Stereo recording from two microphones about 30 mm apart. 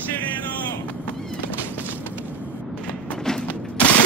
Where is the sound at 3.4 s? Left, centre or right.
Left.